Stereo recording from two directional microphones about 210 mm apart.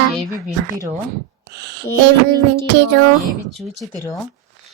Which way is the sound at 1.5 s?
55° right (ahead or behind).